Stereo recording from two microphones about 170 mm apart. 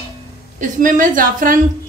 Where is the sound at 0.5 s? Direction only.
50° right (ahead or behind).